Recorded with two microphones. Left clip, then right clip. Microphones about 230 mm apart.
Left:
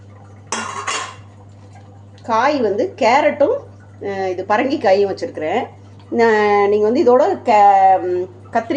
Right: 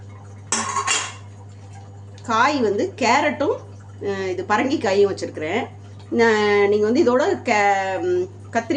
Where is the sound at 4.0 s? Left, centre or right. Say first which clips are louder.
Left 3 dB; centre.